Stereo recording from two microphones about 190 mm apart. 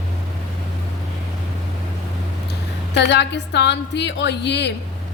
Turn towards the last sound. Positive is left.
turn(degrees=65)  # may be behind; listen again after turning